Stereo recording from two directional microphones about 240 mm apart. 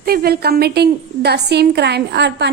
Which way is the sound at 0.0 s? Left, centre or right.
Right.